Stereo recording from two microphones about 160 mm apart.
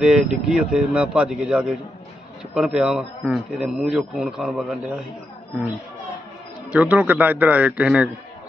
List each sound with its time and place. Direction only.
0.0 s a man's voice: 5° right (ahead or behind)
6.7 s a man's voice: 10° right (ahead or behind)